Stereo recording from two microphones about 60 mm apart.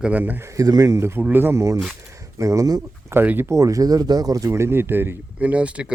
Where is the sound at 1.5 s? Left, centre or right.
Right.